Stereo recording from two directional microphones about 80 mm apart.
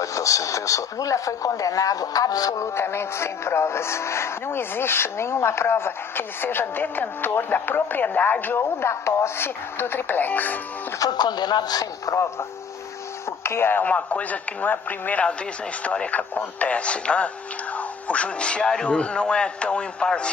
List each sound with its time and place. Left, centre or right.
0.0 s speech: left
11.0 s speech: left
13.4 s speech: left; by 20.2 s centre